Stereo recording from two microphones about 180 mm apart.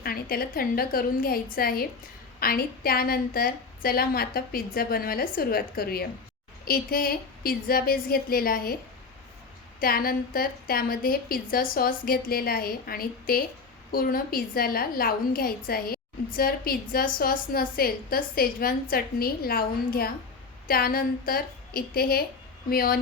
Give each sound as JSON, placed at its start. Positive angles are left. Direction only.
{"t": 0.0, "sound": "a woman's voice", "side_deg": 55}
{"t": 9.8, "sound": "a woman's voice", "side_deg": 55}